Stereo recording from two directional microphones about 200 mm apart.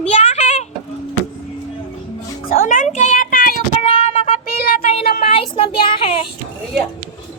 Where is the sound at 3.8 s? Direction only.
30° left (ahead or behind).